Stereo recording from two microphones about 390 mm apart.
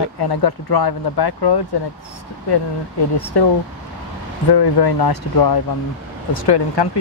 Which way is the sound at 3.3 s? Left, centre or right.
Left.